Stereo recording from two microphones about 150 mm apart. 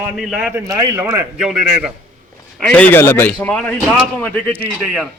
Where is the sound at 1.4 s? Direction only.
5° right (ahead or behind).